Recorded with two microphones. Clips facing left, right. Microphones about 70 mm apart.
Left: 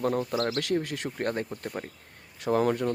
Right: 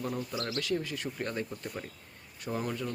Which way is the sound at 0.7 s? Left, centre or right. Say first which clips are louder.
Left 4 dB; left.